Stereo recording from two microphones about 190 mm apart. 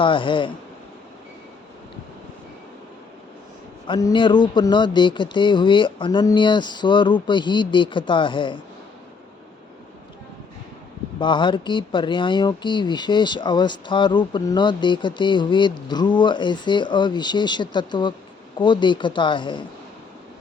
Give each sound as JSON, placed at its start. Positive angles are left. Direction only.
{"t": 0.0, "sound": "speech", "side_deg": 25}
{"t": 3.8, "sound": "speech", "side_deg": 25}
{"t": 11.2, "sound": "speech", "side_deg": 25}